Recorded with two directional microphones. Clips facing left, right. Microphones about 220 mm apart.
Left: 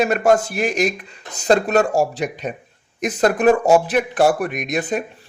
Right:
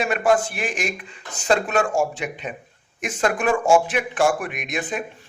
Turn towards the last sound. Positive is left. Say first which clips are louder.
# left 5 dB
turn(degrees=40)  # may be behind; listen again after turning